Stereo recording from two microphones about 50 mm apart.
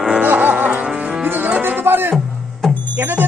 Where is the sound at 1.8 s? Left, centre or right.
Right.